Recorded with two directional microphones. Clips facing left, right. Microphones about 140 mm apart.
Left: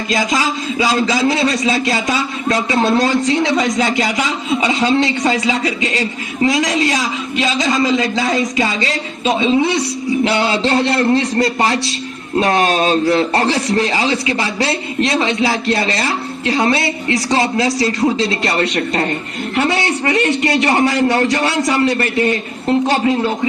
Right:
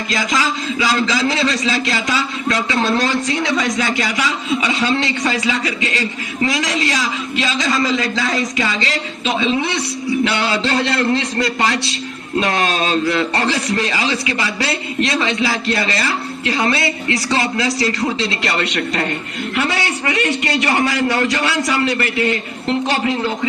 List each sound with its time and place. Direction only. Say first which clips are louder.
0.1 s a man's voice: left 3 dB; 25° left (ahead or behind)